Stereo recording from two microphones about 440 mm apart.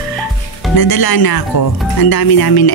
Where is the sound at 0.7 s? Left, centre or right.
Left.